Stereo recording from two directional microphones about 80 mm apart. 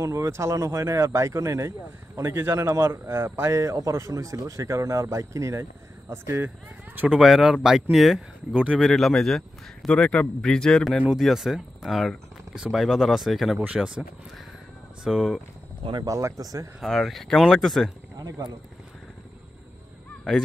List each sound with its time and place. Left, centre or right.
0.0 s a man's voice: right
7.1 s speech: centre
11.1 s speech: centre
15.0 s speech: centre
16.0 s speech: right
16.8 s speech: centre